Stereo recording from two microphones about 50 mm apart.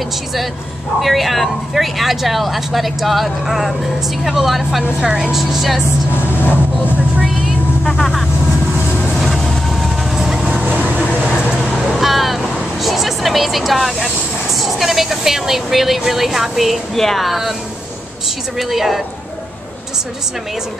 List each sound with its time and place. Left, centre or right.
1.0 s speech: centre
5.0 s speech: centre
5.3 s speech: centre
6.2 s vehicle: left
8.0 s vehicle: centre
10.1 s vehicle: centre
10.5 s vehicle: right
11.7 s vehicle: centre
12.8 s speech: centre
18.6 s speech: centre